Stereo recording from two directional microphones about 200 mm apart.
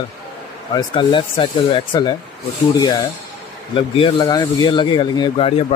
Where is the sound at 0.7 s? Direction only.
25° left (ahead or behind).